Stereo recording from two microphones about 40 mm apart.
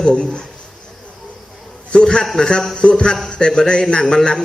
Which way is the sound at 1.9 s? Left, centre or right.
Left.